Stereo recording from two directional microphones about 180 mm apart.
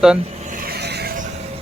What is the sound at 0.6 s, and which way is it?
Vehicle, 60° right (ahead or behind).